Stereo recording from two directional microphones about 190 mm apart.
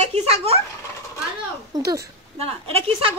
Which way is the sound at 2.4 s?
30° right (ahead or behind).